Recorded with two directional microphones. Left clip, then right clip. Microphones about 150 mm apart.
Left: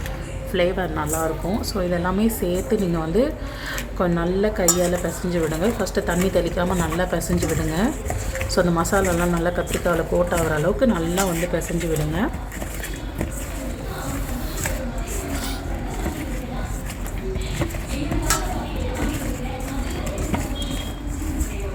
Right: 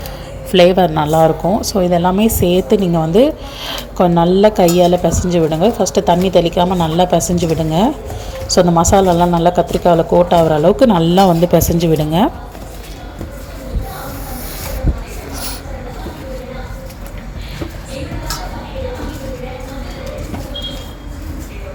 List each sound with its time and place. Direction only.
0.5 s speech: 35° right (ahead or behind)
10.8 s speech: 30° right (ahead or behind)